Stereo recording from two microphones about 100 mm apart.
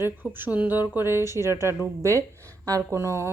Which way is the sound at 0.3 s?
15° right (ahead or behind).